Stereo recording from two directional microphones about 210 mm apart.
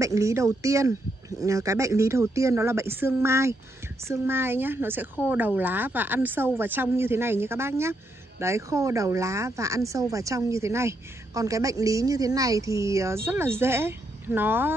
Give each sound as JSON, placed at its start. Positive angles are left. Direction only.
{"t": 0.0, "sound": "speech", "side_deg": -15}